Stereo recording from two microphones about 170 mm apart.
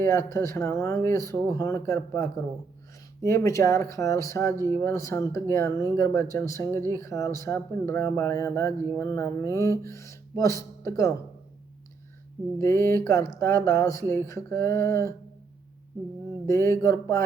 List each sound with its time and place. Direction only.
0.0 s speech: 15° left (ahead or behind)
12.8 s speech: 15° left (ahead or behind)
16.5 s speech: 15° left (ahead or behind)